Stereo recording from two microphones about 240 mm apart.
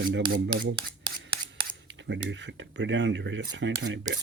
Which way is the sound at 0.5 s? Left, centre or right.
Centre.